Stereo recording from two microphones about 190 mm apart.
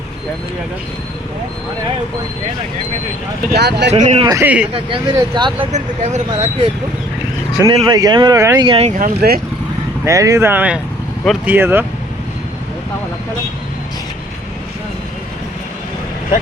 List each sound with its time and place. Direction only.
3.5 s speech: 60° right (ahead or behind)
3.9 s speech: 40° right (ahead or behind)
4.2 s speech: 20° right (ahead or behind)
4.4 s speech: 5° right (ahead or behind)
4.7 s speech: 25° right (ahead or behind)
5.7 s speech: 35° right (ahead or behind)
7.6 s speech: 20° right (ahead or behind)
8.6 s speech: 30° right (ahead or behind)
9.2 s speech: 55° right (ahead or behind)
10.0 s speech: 15° right (ahead or behind)